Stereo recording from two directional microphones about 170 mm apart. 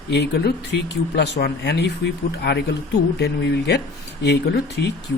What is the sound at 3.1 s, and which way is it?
Speech, 85° left.